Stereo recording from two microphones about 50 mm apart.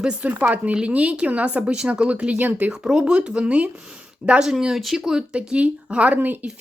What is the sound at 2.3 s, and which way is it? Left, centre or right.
Speech, right.